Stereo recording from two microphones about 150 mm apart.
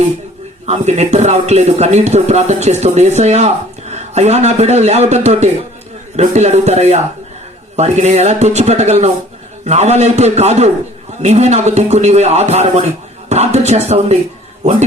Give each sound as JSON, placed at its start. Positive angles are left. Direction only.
{"t": 0.7, "sound": "speech", "side_deg": -50}